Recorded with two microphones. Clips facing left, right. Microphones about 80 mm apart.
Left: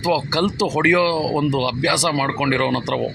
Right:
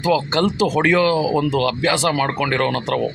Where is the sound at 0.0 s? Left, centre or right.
Centre.